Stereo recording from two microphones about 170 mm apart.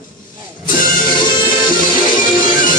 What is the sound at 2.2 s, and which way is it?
Music, 55° left (ahead or behind).